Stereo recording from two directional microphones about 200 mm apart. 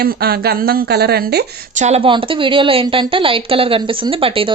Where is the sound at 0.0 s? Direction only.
50° right (ahead or behind).